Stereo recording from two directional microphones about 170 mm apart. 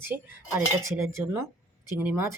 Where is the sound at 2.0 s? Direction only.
15° right (ahead or behind).